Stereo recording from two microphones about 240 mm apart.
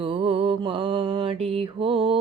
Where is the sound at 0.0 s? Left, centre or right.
Right.